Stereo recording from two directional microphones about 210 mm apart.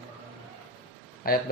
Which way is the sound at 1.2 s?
45° left (ahead or behind).